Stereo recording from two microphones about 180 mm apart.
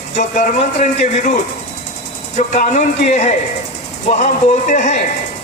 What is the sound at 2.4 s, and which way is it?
Speech, 40° left (ahead or behind).